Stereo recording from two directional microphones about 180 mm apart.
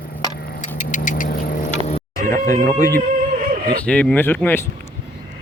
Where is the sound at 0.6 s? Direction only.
45° left (ahead or behind).